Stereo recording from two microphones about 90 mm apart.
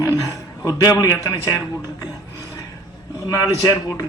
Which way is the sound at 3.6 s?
40° left (ahead or behind).